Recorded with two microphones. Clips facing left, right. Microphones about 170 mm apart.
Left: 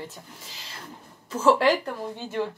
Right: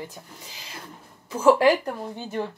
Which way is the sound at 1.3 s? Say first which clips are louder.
Right 3 dB; 15° right (ahead or behind).